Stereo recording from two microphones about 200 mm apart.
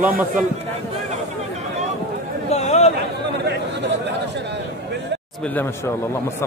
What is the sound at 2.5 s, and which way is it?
Chatter, 35° left (ahead or behind).